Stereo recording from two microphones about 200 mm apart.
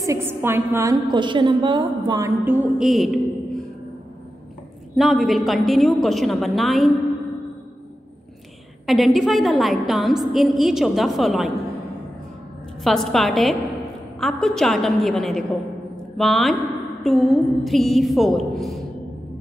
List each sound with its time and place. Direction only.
0.0 s a woman's voice: 15° right (ahead or behind)
4.9 s a woman's voice: centre (ahead or behind)
8.8 s a woman's voice: centre (ahead or behind)
12.8 s a woman's voice: centre (ahead or behind)